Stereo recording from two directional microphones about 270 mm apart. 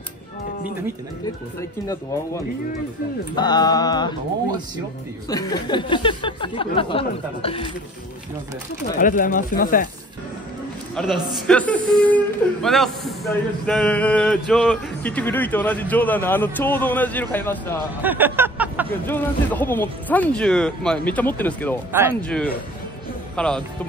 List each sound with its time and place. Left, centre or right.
1.9 s speech: centre
5.3 s speech: centre
8.8 s speech: left
11.0 s speech: centre
17.7 s speech: centre
19.0 s speech: centre